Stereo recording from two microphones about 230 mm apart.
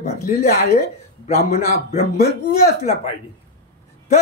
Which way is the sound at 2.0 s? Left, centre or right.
Left.